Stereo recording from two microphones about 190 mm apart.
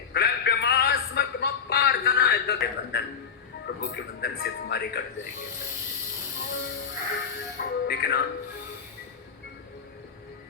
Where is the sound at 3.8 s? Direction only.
55° left (ahead or behind).